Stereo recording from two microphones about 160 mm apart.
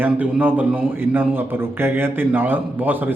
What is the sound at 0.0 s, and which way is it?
A man's voice, 10° right (ahead or behind).